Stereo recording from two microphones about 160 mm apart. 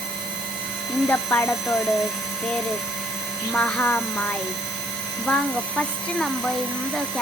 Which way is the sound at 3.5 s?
10° left (ahead or behind).